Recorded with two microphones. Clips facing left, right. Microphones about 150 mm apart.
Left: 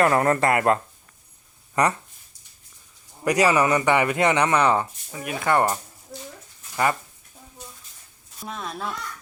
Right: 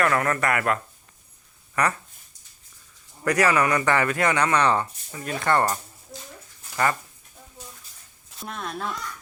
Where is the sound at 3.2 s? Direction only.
15° left (ahead or behind).